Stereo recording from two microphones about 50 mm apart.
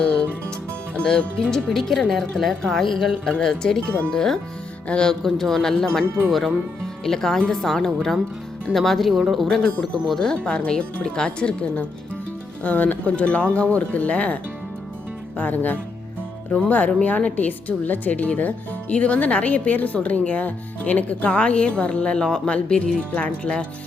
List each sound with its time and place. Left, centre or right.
0.0 s music: centre
1.0 s speech: centre
3.2 s speech: centre
5.2 s speech: centre
10.2 s a woman's voice: centre
12.6 s a woman's voice: left
15.4 s a woman's voice: left; by 23.6 s centre